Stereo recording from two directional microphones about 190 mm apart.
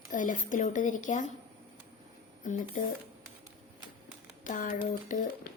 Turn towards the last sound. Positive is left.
turn(degrees=45)  # may be behind; listen again after turning